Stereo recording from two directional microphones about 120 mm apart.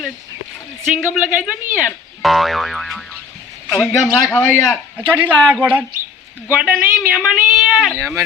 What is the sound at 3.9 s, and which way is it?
Speech, 30° left (ahead or behind).